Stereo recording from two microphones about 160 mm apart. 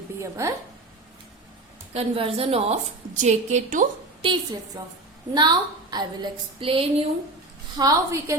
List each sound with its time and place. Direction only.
0.2 s a woman's voice: 20° right (ahead or behind)
1.9 s a woman's voice: 40° right (ahead or behind)
4.2 s a woman's voice: 30° right (ahead or behind)
7.8 s a woman's voice: 20° right (ahead or behind)